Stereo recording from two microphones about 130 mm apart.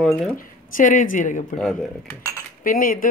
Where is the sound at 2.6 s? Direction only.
90° left.